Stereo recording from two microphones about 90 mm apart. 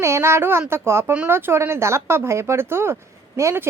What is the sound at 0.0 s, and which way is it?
A woman's voice, 30° right (ahead or behind).